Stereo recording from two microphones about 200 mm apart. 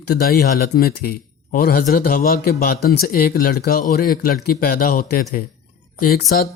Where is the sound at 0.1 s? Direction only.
50° left (ahead or behind).